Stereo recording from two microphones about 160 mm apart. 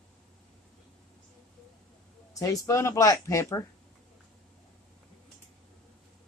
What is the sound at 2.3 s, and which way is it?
Speech, 20° left (ahead or behind).